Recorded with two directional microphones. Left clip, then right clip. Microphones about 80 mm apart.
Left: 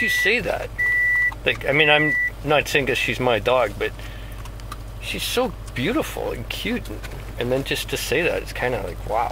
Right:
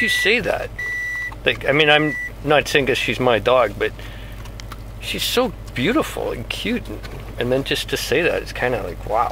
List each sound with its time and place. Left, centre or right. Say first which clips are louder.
0.0 s speech: right 2 dB; right
5.0 s speech: right 3 dB; right